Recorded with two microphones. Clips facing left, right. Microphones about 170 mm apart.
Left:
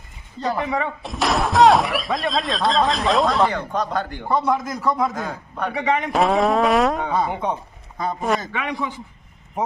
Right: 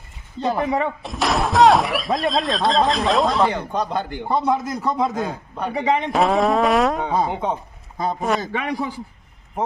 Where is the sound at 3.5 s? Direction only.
20° right (ahead or behind).